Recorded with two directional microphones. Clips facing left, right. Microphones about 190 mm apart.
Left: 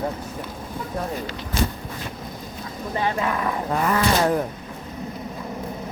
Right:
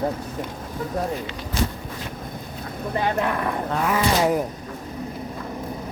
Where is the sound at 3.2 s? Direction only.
55° right (ahead or behind).